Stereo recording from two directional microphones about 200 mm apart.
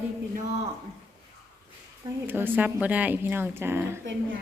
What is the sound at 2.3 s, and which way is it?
A woman's voice, 10° right (ahead or behind).